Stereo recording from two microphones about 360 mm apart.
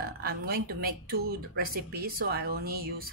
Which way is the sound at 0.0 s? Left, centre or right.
Right.